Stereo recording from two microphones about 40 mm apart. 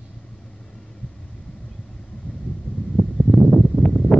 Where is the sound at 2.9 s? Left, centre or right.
Centre.